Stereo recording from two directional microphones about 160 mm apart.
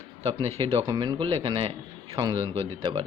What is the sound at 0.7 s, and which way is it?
A man's voice, 35° right (ahead or behind).